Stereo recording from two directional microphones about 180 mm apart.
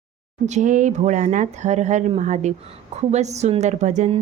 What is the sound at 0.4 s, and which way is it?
A woman's voice, 45° right (ahead or behind).